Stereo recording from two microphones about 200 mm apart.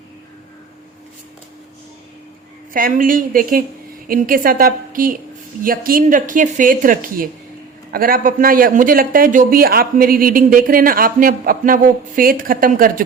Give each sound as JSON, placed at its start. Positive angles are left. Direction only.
{"t": 2.7, "sound": "a man's voice", "side_deg": -45}